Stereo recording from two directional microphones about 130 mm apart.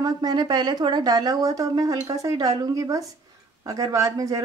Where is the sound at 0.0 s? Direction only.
30° right (ahead or behind).